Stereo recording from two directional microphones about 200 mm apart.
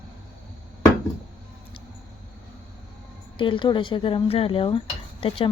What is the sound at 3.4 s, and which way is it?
Speech, 25° left (ahead or behind).